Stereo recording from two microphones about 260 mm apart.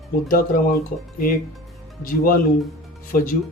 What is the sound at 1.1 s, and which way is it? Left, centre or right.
Speech, left.